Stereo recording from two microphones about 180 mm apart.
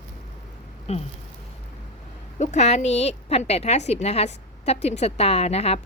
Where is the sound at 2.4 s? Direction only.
40° left (ahead or behind).